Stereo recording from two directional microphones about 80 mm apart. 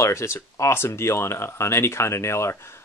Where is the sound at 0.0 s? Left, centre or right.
Left.